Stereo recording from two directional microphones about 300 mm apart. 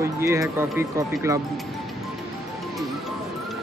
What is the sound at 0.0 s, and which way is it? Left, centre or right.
Speech, centre.